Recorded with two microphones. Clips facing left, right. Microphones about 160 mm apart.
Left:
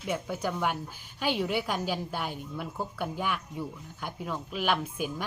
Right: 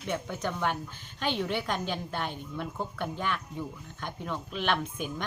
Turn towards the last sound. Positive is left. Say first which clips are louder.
# left 1 dB
turn(degrees=5)  # may be behind; listen again after turning